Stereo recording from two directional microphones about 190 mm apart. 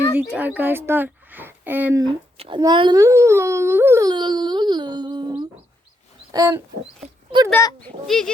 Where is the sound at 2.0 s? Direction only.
25° right (ahead or behind).